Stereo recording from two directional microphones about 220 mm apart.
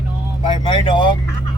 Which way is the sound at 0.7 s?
20° left (ahead or behind).